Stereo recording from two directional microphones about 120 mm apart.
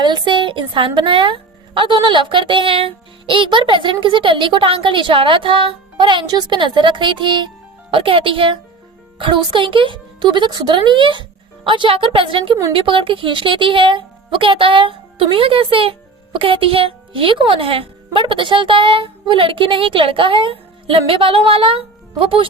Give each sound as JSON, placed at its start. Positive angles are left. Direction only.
{"t": 0.0, "sound": "a woman's voice", "side_deg": -35}